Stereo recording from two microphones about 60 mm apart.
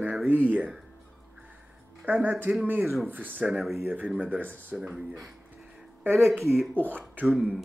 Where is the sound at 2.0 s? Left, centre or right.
Right.